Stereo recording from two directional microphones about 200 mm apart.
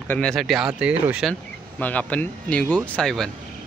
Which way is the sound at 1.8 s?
5° left (ahead or behind).